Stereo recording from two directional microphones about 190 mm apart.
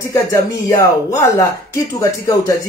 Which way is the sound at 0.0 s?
15° left (ahead or behind).